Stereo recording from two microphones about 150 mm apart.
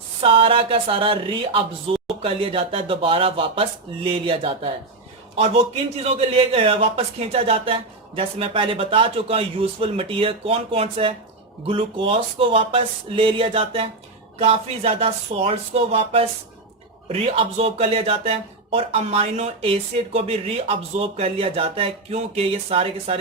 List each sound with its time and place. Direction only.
0.2 s speech: 35° right (ahead or behind)
6.0 s speech: 45° right (ahead or behind)